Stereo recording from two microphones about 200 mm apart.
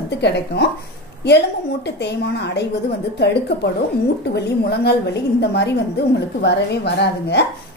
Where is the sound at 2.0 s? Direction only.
55° left (ahead or behind).